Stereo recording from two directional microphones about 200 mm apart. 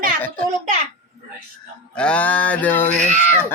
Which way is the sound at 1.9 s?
5° left (ahead or behind).